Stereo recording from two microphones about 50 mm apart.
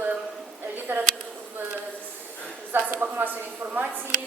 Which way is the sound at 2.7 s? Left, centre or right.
Right.